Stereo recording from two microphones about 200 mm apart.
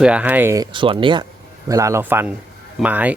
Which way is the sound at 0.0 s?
5° right (ahead or behind).